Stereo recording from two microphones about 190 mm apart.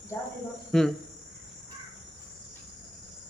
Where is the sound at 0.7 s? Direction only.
Centre (ahead or behind).